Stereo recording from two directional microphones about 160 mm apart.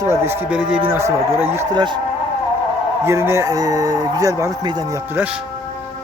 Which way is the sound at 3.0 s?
15° right (ahead or behind).